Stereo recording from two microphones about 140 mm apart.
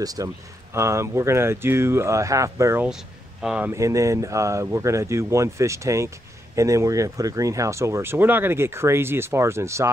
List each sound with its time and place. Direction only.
0.0 s speech: 25° right (ahead or behind)
3.4 s speech: 10° right (ahead or behind)
3.7 s speech: 20° right (ahead or behind)